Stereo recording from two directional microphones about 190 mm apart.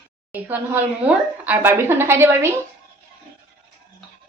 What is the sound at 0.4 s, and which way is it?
A woman's voice, 10° right (ahead or behind).